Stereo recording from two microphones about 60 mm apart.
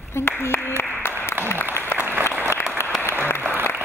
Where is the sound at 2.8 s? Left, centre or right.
Left.